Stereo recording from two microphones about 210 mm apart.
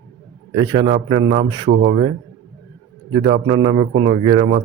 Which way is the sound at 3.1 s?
25° right (ahead or behind).